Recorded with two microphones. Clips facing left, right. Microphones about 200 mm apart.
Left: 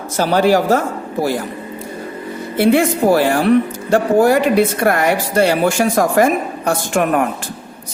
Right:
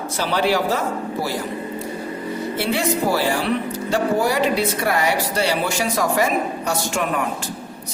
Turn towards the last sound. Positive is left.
turn(degrees=55)  # may be behind; listen again after turning